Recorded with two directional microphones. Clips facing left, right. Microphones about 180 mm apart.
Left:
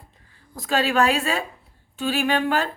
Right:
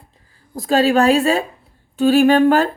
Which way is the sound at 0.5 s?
35° right (ahead or behind).